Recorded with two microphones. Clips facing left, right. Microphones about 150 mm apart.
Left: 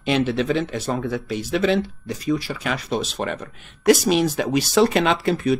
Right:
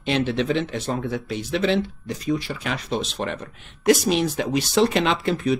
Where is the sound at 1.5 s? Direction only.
45° left (ahead or behind).